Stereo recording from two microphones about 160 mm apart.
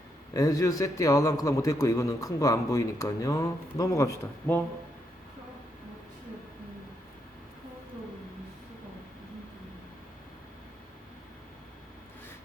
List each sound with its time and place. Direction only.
0.3 s a man's voice: 20° left (ahead or behind)